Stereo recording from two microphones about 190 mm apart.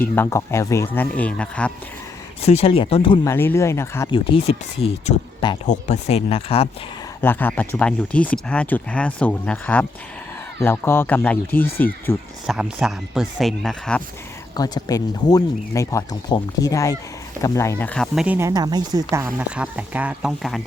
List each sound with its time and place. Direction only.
0.0 s speech: 15° left (ahead or behind)
2.4 s speech: 35° left (ahead or behind)
3.2 s speech: 10° left (ahead or behind)
4.1 s speech: 30° left (ahead or behind)
5.6 s speech: 40° left (ahead or behind)
7.2 s speech: 10° left (ahead or behind)
12.5 s speech: 5° right (ahead or behind)
14.5 s speech: 20° left (ahead or behind); by 18.3 s centre (ahead or behind)
18.3 s speech: 20° right (ahead or behind); by 20.6 s centre (ahead or behind)